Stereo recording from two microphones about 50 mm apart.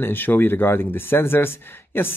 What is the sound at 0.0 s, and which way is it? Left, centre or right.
Speech, left.